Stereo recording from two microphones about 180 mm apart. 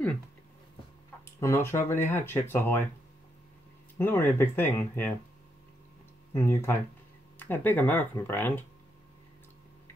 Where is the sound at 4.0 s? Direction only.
10° left (ahead or behind).